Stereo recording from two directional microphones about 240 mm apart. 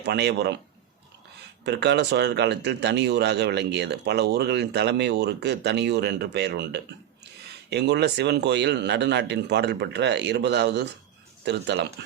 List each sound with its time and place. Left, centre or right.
0.0 s speech: right
1.6 s speech: right